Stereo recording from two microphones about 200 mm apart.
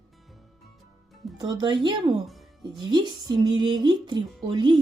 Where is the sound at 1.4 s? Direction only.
20° right (ahead or behind).